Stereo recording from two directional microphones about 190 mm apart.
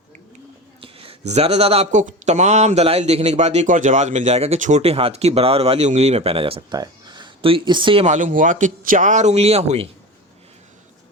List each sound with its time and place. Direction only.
0.8 s speech: 30° right (ahead or behind)